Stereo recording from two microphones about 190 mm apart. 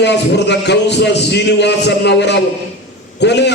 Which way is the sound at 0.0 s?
65° left (ahead or behind).